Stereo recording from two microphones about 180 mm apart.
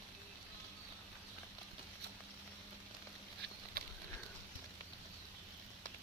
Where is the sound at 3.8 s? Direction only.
55° right (ahead or behind).